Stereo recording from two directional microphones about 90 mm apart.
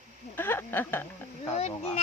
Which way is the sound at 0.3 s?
25° left (ahead or behind).